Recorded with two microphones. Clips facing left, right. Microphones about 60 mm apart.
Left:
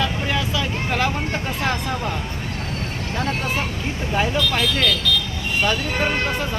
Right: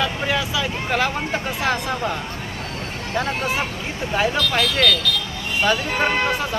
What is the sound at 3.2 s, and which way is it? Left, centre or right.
Speech, centre.